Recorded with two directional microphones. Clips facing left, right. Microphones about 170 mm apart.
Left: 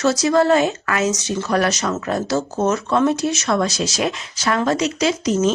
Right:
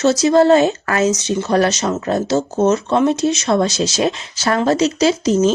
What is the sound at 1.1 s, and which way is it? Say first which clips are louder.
Speech: right 4 dB; 20° right (ahead or behind).